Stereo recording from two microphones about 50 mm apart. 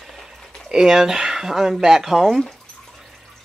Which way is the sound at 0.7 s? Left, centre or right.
Centre.